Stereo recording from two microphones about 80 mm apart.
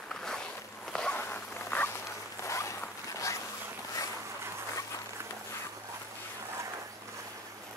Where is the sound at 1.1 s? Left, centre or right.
Left.